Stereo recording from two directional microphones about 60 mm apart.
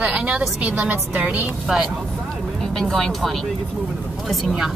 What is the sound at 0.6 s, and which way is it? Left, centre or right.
Speech, right.